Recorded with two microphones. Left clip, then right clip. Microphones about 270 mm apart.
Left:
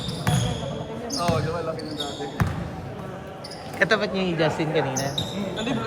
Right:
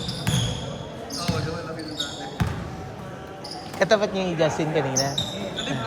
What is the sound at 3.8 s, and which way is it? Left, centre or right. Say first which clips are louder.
Speech: right 1 dB; centre.